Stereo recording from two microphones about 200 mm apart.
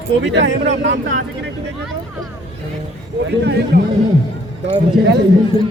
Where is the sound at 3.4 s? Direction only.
55° right (ahead or behind).